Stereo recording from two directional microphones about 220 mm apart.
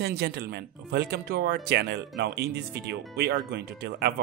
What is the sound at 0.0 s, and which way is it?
Speech, 45° right (ahead or behind).